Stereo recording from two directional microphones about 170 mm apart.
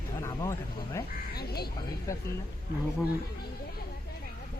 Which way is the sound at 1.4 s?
70° left (ahead or behind).